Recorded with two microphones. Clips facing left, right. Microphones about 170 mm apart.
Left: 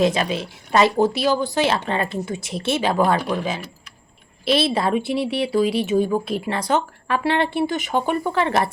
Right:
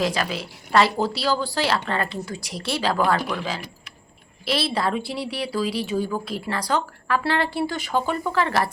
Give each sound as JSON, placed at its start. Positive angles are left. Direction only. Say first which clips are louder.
{"t": 0.0, "sound": "speech", "louder": "left 5 dB", "side_deg": 20}